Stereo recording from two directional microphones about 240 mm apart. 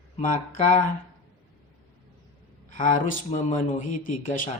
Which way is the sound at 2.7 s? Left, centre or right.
Left.